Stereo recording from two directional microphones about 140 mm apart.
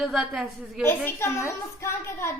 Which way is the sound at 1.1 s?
20° left (ahead or behind).